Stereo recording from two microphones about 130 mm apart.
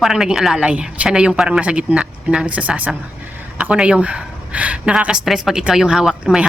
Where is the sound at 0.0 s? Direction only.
5° right (ahead or behind).